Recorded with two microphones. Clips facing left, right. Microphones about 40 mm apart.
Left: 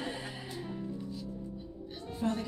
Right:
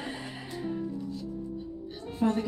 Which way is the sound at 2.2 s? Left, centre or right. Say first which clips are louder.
Right 6 dB; centre.